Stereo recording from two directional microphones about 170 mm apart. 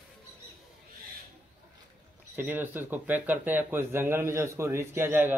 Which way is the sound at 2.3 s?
10° right (ahead or behind).